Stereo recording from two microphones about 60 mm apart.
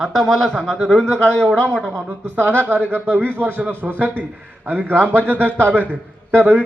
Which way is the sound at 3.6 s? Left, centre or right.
Right.